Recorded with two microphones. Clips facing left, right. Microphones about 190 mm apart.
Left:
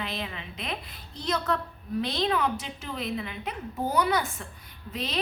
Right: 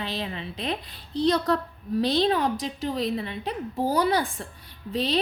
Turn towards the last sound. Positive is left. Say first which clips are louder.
# right 7 dB
turn(degrees=-35)  # may be behind; listen again after turning